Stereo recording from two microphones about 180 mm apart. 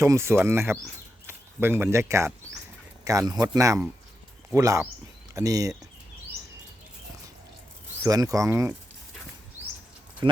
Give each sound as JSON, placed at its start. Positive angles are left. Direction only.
{"t": 0.0, "sound": "a man's voice", "side_deg": -15}
{"t": 8.0, "sound": "a man's voice", "side_deg": -20}